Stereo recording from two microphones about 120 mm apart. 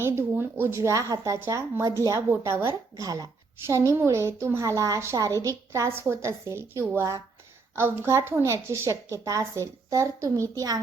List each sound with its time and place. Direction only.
0.0 s a woman's voice: 20° right (ahead or behind)